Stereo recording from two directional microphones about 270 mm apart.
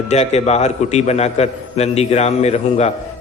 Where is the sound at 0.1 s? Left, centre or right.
Left.